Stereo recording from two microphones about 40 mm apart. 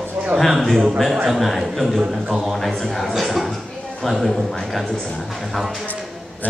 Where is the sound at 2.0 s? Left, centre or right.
Centre.